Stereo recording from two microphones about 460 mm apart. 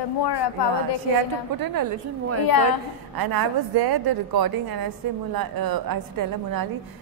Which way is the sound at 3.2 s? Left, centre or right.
Right.